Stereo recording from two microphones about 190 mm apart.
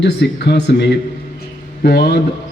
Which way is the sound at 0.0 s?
65° left (ahead or behind).